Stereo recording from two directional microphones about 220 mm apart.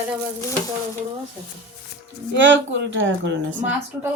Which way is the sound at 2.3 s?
55° right (ahead or behind).